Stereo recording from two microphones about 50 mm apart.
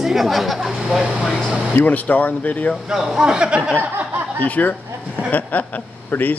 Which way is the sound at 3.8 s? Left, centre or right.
Right.